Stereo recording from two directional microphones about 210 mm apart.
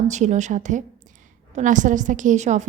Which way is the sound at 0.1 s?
35° right (ahead or behind).